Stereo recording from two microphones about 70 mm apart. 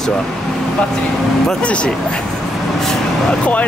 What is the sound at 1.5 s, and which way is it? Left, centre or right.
Speech, centre.